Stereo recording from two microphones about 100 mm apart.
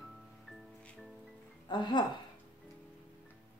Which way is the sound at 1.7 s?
50° left (ahead or behind).